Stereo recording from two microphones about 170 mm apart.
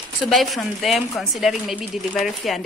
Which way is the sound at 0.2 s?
Centre (ahead or behind).